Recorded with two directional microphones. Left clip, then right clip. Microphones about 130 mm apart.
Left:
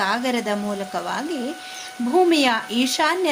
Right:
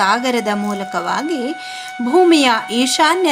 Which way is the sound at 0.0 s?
30° right (ahead or behind).